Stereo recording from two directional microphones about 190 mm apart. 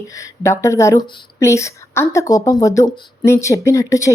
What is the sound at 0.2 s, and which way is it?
Speech, 15° left (ahead or behind).